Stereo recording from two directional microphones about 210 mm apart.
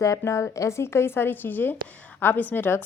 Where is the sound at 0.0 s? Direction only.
15° left (ahead or behind).